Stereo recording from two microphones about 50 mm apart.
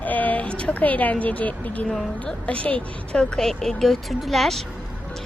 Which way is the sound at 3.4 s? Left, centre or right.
Centre.